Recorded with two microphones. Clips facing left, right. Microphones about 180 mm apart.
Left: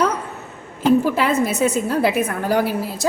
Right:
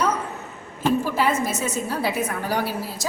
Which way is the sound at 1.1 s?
65° left (ahead or behind).